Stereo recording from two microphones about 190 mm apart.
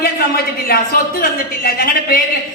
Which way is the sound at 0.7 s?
50° left (ahead or behind).